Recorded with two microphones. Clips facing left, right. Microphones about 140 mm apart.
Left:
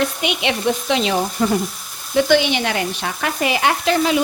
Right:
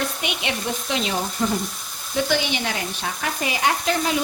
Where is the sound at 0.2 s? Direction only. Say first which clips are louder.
Left 6 dB; 90° left.